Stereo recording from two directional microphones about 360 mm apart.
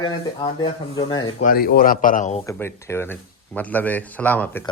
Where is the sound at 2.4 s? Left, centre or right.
Centre.